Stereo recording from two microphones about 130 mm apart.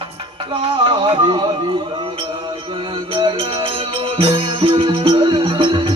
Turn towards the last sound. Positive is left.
turn(degrees=-40)  # may be behind; listen again after turning